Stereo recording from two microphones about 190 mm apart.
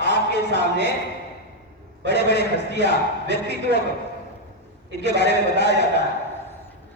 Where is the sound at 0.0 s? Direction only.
65° left (ahead or behind).